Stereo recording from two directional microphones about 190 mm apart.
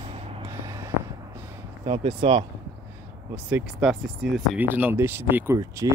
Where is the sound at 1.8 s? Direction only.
25° right (ahead or behind).